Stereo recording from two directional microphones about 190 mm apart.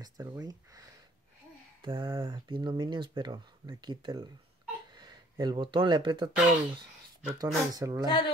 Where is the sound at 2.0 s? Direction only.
20° right (ahead or behind).